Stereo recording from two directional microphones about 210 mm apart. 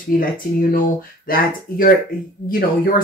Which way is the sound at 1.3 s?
45° left (ahead or behind).